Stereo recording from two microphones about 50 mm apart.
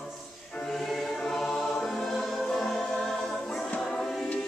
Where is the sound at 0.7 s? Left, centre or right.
Centre.